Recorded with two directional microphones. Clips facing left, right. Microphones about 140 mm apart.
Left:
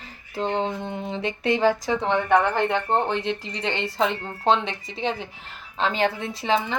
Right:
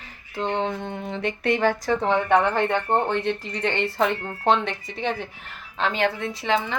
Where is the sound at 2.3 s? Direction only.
5° left (ahead or behind).